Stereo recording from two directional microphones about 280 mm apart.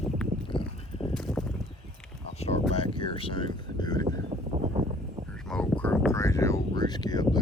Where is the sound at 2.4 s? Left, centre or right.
Left.